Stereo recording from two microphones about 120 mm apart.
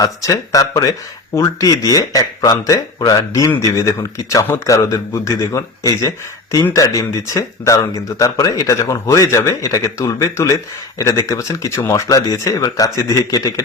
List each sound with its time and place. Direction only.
0.0 s speech: 30° left (ahead or behind)